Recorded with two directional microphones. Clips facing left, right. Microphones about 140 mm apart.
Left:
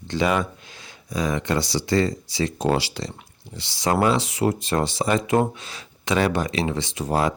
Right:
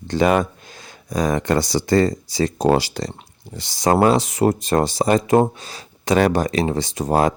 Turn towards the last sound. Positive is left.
turn(degrees=-45)  # may be behind; listen again after turning